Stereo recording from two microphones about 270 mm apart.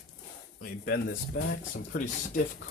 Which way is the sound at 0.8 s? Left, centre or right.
Left.